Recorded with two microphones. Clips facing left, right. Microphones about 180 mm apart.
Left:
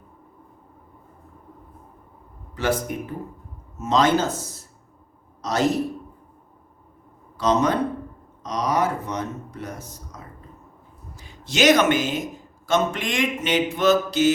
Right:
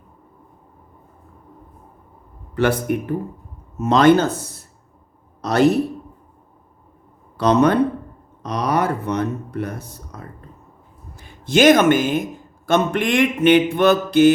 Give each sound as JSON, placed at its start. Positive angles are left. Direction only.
{"t": 2.6, "sound": "a man's voice", "side_deg": -60}
{"t": 7.3, "sound": "a man's voice", "side_deg": -60}